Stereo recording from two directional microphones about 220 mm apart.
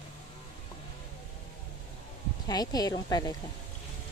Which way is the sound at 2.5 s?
15° left (ahead or behind).